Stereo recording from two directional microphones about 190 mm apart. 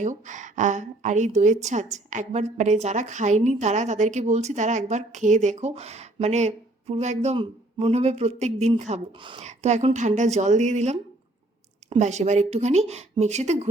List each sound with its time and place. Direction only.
0.0 s a woman's voice: 40° right (ahead or behind)
9.5 s a woman's voice: 35° right (ahead or behind)